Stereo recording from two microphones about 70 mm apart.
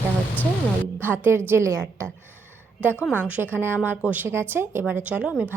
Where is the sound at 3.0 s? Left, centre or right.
Right.